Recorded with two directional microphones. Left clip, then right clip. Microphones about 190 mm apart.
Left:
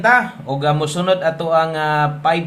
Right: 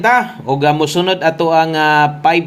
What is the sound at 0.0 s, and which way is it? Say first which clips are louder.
Speech: right 2 dB; 30° right (ahead or behind).